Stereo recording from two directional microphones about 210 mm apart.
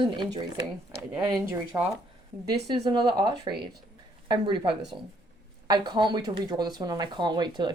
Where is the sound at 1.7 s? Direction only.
15° right (ahead or behind).